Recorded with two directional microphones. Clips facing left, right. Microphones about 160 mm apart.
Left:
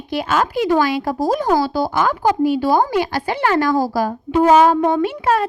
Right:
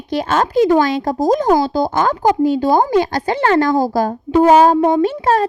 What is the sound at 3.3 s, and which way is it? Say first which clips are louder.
Speech: right 3 dB; 20° right (ahead or behind).